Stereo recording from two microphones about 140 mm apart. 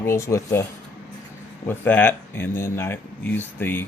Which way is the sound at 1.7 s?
10° left (ahead or behind).